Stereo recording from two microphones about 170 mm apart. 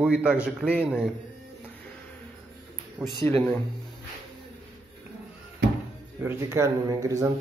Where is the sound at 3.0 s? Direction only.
10° right (ahead or behind).